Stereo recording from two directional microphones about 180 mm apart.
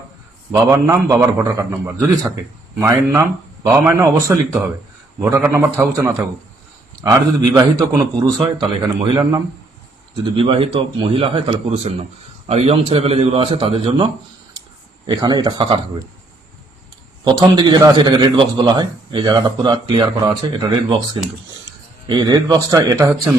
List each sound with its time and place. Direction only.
0.5 s a man's voice: 20° right (ahead or behind)
17.2 s a man's voice: 20° right (ahead or behind)
22.1 s a man's voice: 20° right (ahead or behind)